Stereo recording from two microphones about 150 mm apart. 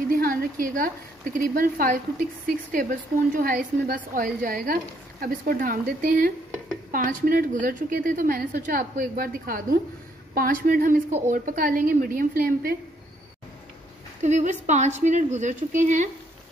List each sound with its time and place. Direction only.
0.1 s a woman's voice: 85° right
14.2 s a woman's voice: 50° right (ahead or behind)